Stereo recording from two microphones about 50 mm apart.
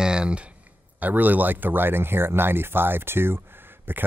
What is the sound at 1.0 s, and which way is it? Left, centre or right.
Speech, right.